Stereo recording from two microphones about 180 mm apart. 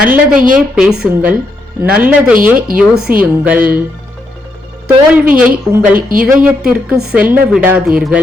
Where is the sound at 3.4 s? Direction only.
10° right (ahead or behind).